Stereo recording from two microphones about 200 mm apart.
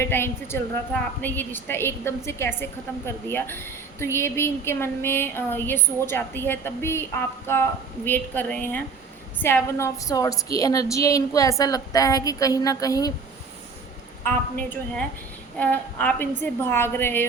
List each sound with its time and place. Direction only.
0.0 s a woman's voice: 10° left (ahead or behind)
14.3 s a woman's voice: 10° left (ahead or behind)